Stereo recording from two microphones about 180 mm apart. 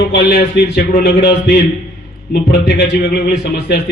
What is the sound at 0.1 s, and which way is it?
A man's voice, 65° left (ahead or behind).